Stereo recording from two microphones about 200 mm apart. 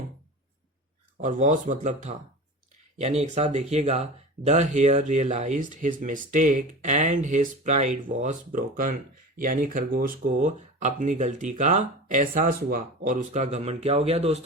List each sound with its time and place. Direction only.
1.2 s speech: 40° right (ahead or behind)